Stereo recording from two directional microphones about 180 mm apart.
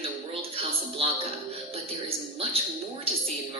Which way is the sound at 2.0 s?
35° right (ahead or behind).